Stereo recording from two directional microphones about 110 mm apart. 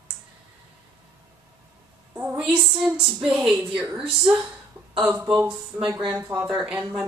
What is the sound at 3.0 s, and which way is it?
Speech, 5° right (ahead or behind).